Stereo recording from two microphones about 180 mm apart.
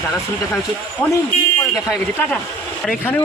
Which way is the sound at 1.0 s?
15° left (ahead or behind).